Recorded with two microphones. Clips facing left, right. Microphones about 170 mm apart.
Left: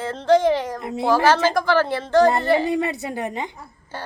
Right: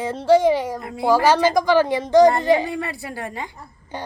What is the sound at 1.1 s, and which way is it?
Speech, 10° right (ahead or behind).